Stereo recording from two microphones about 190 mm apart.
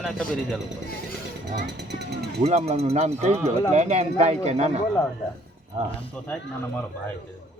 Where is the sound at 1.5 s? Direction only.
65° right (ahead or behind).